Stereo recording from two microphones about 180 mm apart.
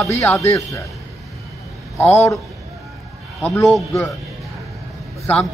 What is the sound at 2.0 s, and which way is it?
Speech, 15° left (ahead or behind).